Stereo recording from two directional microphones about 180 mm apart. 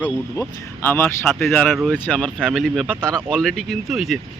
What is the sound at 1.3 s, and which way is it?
Speech, centre (ahead or behind).